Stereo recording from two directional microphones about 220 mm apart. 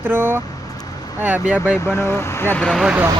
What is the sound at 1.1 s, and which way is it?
Speech, 10° right (ahead or behind).